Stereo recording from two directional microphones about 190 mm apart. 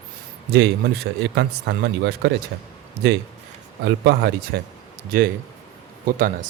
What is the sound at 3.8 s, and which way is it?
Speech, 60° right (ahead or behind).